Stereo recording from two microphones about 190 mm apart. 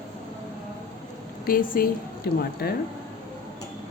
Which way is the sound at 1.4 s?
50° left (ahead or behind).